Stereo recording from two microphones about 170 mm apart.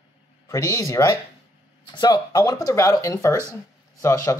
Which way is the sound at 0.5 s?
20° left (ahead or behind).